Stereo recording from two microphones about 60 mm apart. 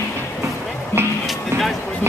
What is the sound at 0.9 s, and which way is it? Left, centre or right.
Speech, left.